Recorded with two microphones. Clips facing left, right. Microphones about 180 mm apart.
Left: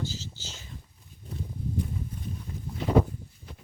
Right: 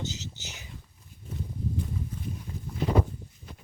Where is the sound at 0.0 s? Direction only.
20° right (ahead or behind).